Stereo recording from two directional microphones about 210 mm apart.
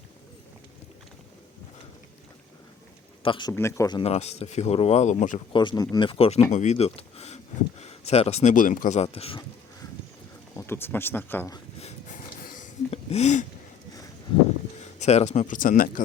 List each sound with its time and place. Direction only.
3.2 s speech: 20° left (ahead or behind)
5.5 s speech: 20° left (ahead or behind)
10.7 s speech: 10° left (ahead or behind)
11.8 s a sound: 35° left (ahead or behind)
14.8 s speech: 35° left (ahead or behind)